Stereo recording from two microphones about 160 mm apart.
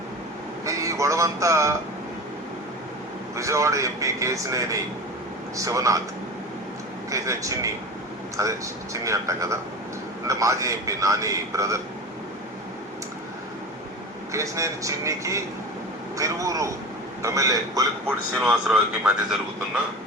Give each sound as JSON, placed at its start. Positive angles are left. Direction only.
{"t": 0.6, "sound": "a sound", "side_deg": -20}
{"t": 3.3, "sound": "a man's voice", "side_deg": -20}
{"t": 7.1, "sound": "a man's voice", "side_deg": -20}
{"t": 14.3, "sound": "a man's voice", "side_deg": -20}
{"t": 18.3, "sound": "a man's voice", "side_deg": -5}